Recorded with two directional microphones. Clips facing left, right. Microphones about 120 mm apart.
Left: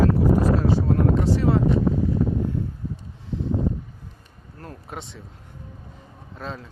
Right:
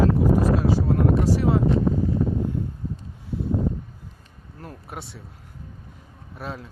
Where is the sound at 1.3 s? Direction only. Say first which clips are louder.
Left 1 dB; 15° right (ahead or behind).